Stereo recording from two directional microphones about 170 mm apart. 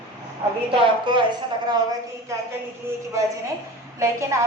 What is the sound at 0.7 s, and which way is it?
A woman's voice, 30° right (ahead or behind).